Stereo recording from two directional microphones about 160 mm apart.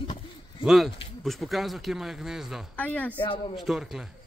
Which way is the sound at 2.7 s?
10° left (ahead or behind).